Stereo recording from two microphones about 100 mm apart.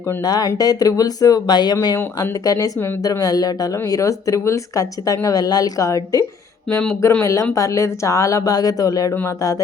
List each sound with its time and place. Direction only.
0.2 s speech: 40° left (ahead or behind)